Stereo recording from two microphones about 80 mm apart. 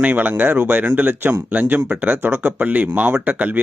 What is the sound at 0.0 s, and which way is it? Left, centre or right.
Speech, right.